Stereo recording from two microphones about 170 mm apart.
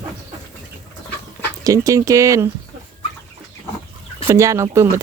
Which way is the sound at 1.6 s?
20° right (ahead or behind).